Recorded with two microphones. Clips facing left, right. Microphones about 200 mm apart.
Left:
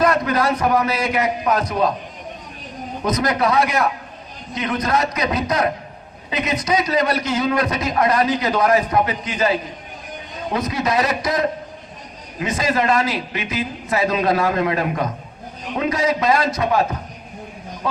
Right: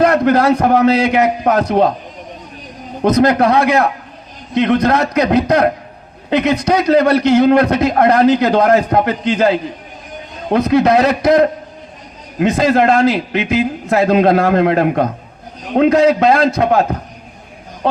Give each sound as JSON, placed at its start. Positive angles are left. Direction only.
{"t": 0.0, "sound": "a man's voice", "side_deg": -60}
{"t": 3.0, "sound": "a man's voice", "side_deg": -60}